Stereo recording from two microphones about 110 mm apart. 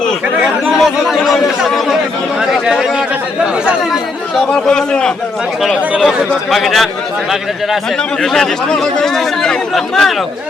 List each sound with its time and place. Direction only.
0.4 s speech: centre (ahead or behind)
4.4 s a man's voice: 5° left (ahead or behind)
8.2 s speech: 5° left (ahead or behind)